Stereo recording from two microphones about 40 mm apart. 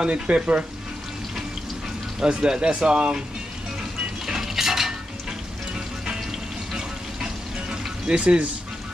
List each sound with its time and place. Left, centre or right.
0.0 s speech: right
2.2 s speech: right
4.3 s dishes: centre
7.7 s a sound: right